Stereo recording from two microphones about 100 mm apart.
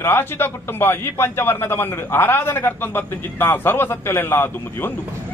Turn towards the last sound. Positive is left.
turn(degrees=20)  # may be behind; listen again after turning